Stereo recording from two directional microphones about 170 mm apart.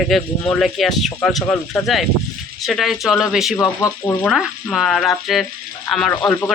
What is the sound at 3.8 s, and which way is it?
Speech, 15° left (ahead or behind).